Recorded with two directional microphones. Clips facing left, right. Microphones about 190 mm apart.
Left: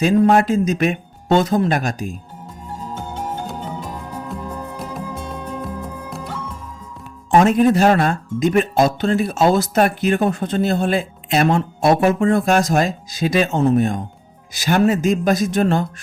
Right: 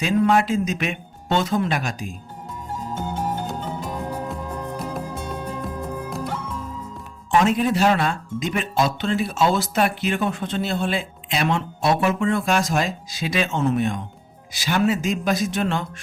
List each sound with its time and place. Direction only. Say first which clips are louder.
0.0 s speech: left 5 dB; 45° left (ahead or behind)
4.8 s music: left 1 dB; centre (ahead or behind)
7.3 s speech: left 6 dB; 45° left (ahead or behind)